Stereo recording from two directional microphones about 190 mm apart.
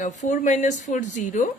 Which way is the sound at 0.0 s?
40° left (ahead or behind).